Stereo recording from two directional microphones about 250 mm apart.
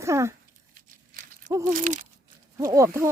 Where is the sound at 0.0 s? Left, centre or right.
Centre.